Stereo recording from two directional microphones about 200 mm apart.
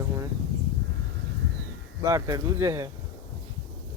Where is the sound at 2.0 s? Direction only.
15° right (ahead or behind).